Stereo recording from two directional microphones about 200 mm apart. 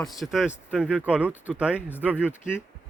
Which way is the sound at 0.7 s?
5° right (ahead or behind).